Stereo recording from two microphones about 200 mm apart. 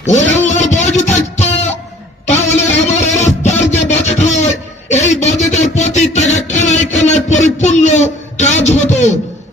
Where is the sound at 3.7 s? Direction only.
35° left (ahead or behind).